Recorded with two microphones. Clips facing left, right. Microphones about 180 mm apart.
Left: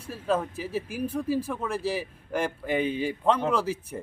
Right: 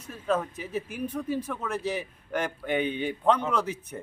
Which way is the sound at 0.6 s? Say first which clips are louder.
Left 2 dB; 5° left (ahead or behind).